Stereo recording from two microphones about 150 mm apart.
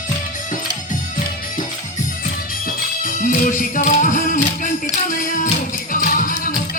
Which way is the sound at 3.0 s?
60° left (ahead or behind).